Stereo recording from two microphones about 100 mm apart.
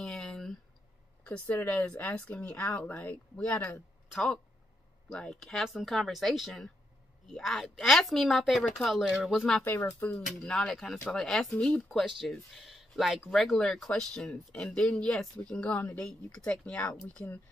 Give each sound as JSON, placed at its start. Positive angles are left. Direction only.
{"t": 0.0, "sound": "a sound", "side_deg": 5}
{"t": 1.2, "sound": "speech", "side_deg": 15}
{"t": 9.7, "sound": "speech", "side_deg": 25}
{"t": 10.1, "sound": "speech", "side_deg": 10}
{"t": 11.5, "sound": "speech", "side_deg": 15}
{"t": 12.2, "sound": "speech", "side_deg": 0}